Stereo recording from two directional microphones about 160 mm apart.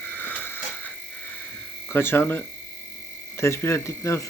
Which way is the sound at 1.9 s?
15° left (ahead or behind).